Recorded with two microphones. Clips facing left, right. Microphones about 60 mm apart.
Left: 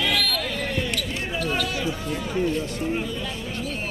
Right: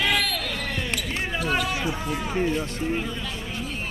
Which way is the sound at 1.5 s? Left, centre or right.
Right.